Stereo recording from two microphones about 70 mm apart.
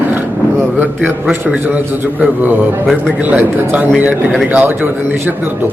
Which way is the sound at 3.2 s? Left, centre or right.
Right.